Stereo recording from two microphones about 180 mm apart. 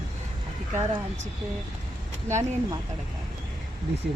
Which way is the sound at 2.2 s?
15° right (ahead or behind).